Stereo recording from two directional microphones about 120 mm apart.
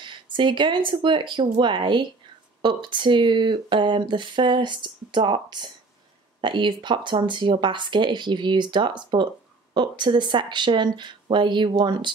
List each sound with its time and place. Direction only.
0.0 s speech: 40° right (ahead or behind)